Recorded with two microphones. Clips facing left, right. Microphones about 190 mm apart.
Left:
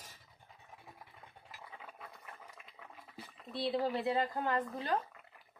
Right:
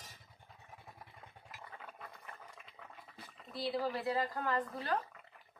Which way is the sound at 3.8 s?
25° left (ahead or behind).